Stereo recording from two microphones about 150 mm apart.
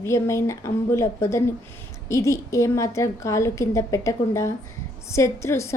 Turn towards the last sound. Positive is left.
turn(degrees=20)  # may be behind; listen again after turning